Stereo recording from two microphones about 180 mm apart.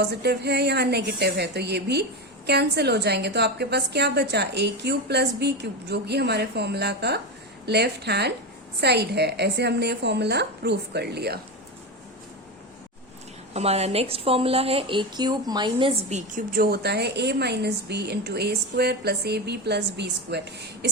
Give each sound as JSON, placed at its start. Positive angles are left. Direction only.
{"t": 0.0, "sound": "a woman's voice", "side_deg": -65}
{"t": 13.5, "sound": "a woman's voice", "side_deg": -35}